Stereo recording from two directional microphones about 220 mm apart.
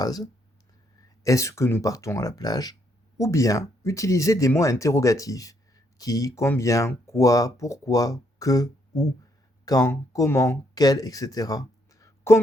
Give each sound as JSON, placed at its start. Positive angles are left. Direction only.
{"t": 0.0, "sound": "speech", "side_deg": 15}